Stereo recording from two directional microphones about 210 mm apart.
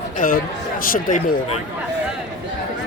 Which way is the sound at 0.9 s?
40° left (ahead or behind).